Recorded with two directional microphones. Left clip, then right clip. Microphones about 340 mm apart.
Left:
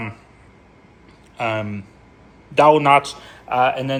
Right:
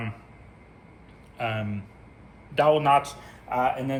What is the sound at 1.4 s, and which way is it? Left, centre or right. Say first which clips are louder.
A man's voice: left 7 dB; centre.